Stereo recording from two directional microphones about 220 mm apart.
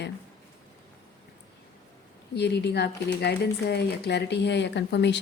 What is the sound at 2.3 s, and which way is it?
A woman's voice, 50° left (ahead or behind).